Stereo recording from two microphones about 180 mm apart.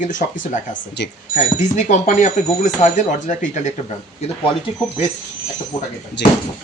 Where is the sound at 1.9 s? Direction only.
40° left (ahead or behind).